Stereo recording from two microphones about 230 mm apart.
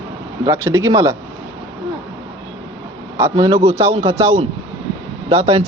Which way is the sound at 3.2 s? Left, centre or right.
Centre.